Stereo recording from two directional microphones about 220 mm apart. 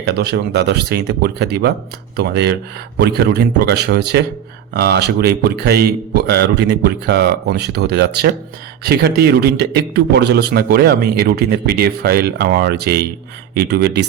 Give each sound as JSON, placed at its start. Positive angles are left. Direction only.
{"t": 0.0, "sound": "a man's voice", "side_deg": -50}